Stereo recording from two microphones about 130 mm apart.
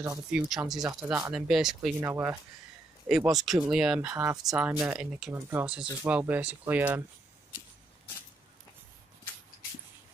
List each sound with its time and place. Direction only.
0.3 s speech: 5° right (ahead or behind)
0.8 s speech: 20° right (ahead or behind)
1.3 s speech: 5° right (ahead or behind)
2.0 s speech: 15° right (ahead or behind)
3.1 s speech: 5° right (ahead or behind)
5.3 s speech: 15° right (ahead or behind)